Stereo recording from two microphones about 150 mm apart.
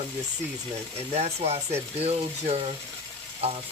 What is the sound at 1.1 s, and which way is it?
Speech, 45° right (ahead or behind).